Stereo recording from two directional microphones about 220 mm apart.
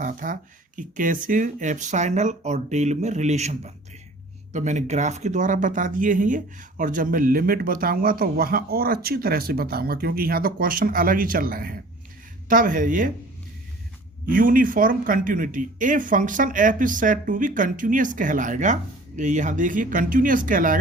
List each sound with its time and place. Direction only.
0.0 s speech: 35° right (ahead or behind)
14.3 s speech: 40° right (ahead or behind)